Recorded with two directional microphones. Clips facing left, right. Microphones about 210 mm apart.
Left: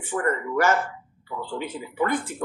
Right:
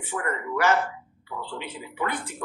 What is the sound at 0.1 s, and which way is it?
Speech, 45° left (ahead or behind).